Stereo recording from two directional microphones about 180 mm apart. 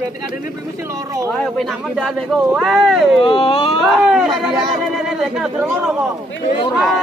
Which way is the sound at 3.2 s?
25° left (ahead or behind).